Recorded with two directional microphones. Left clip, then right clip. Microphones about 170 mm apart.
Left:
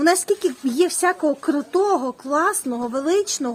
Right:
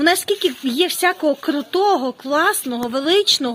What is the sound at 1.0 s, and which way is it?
Speech, 25° right (ahead or behind).